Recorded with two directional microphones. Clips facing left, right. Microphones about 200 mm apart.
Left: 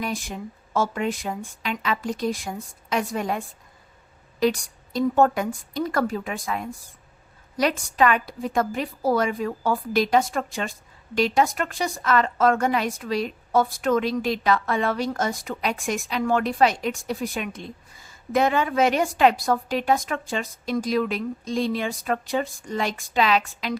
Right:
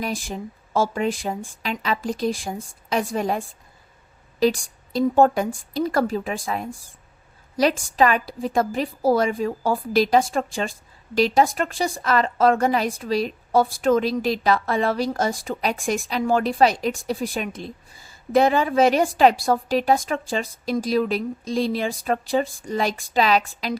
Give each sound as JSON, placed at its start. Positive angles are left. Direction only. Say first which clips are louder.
{"t": 0.0, "sound": "a woman's voice", "louder": "right 2 dB", "side_deg": -30}